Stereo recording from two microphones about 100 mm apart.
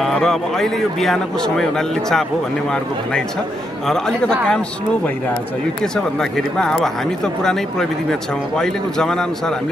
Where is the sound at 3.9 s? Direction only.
5° left (ahead or behind).